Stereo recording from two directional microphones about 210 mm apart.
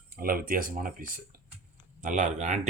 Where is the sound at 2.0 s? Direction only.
35° right (ahead or behind).